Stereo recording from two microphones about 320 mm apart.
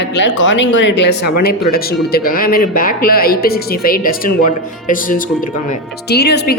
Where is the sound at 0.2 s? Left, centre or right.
Left.